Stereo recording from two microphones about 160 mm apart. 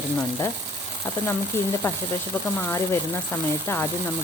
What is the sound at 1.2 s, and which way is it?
Speech, 15° left (ahead or behind).